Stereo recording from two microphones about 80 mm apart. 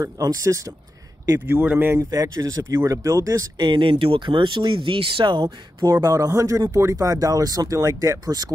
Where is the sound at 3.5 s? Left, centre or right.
Right.